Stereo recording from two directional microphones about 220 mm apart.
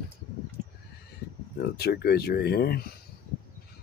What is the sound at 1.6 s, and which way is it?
Speech, 45° left (ahead or behind).